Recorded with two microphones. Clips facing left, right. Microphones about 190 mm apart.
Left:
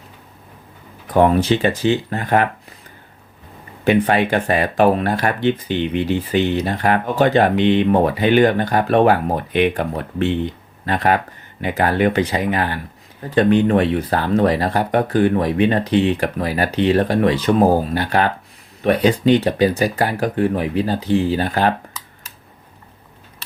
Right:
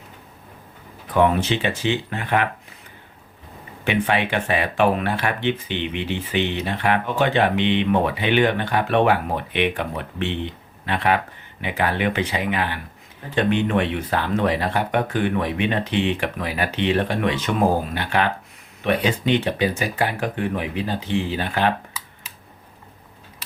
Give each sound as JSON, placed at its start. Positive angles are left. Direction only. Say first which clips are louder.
{"t": 1.1, "sound": "speech", "louder": "left 4 dB", "side_deg": 40}
{"t": 3.8, "sound": "speech", "louder": "left 6 dB", "side_deg": 40}